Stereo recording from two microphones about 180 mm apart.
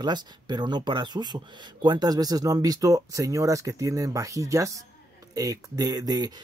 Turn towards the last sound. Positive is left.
turn(degrees=-20)  # may be behind; listen again after turning